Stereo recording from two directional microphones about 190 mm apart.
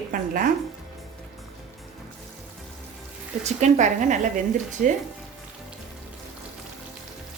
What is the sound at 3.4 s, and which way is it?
Speech, 40° right (ahead or behind).